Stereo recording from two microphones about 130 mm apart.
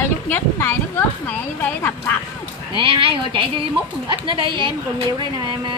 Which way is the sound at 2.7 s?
45° right (ahead or behind).